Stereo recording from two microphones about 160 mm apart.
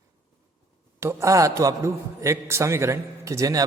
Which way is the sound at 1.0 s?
15° right (ahead or behind).